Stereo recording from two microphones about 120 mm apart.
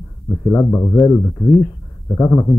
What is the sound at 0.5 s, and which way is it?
Speech, 25° left (ahead or behind).